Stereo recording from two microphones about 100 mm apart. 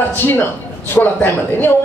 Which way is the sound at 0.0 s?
20° left (ahead or behind).